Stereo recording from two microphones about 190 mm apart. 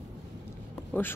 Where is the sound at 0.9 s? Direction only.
10° left (ahead or behind).